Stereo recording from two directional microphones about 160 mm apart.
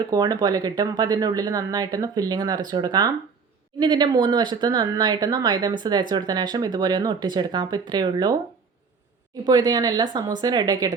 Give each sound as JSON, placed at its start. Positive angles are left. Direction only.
{"t": 0.0, "sound": "speech", "side_deg": -25}
{"t": 9.5, "sound": "speech", "side_deg": -25}